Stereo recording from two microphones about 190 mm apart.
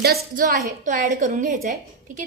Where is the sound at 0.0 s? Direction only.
50° right (ahead or behind).